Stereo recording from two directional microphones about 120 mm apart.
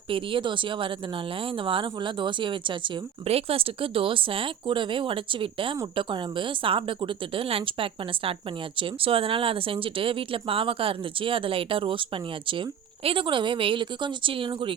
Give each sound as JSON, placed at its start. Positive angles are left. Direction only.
{"t": 0.1, "sound": "speech", "side_deg": -45}
{"t": 3.2, "sound": "speech", "side_deg": -55}